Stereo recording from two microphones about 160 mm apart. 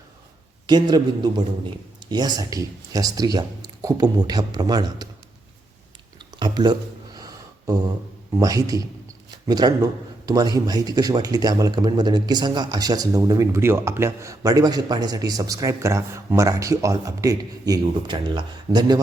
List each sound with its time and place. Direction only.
0.7 s speech: 25° right (ahead or behind)
6.1 s a sound: 25° right (ahead or behind)
8.4 s speech: 20° right (ahead or behind)